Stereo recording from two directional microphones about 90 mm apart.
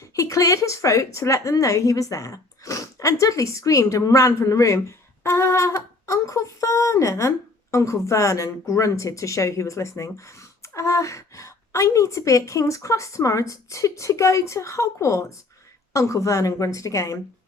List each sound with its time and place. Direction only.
0.2 s wind instrument: 40° left (ahead or behind)